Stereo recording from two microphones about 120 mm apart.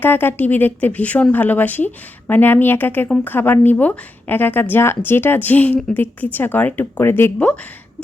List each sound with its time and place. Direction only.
0.0 s speech: 15° left (ahead or behind)